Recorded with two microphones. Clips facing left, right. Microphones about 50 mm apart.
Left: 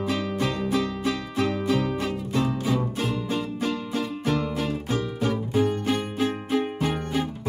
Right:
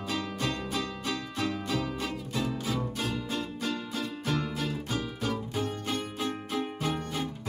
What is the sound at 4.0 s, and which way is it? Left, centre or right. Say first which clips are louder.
Music: left 6 dB; centre.